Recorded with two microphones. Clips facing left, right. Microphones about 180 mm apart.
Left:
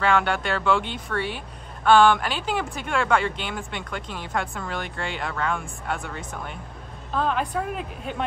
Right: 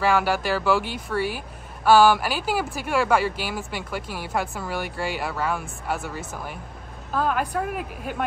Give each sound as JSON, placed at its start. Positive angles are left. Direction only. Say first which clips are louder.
{"t": 0.0, "sound": "a woman's voice", "louder": "right 1 dB", "side_deg": -5}